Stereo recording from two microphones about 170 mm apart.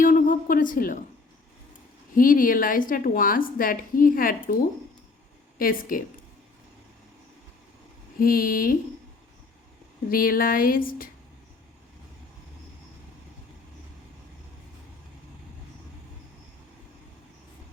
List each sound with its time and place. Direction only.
0.0 s a sound: 55° left (ahead or behind)
2.1 s a woman's voice: 55° left (ahead or behind)
5.5 s a woman's voice: 55° left (ahead or behind)
8.2 s a woman's voice: 55° left (ahead or behind)
10.1 s a woman's voice: 55° left (ahead or behind)